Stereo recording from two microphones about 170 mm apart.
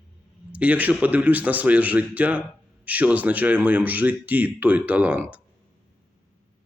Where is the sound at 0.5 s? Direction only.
10° right (ahead or behind).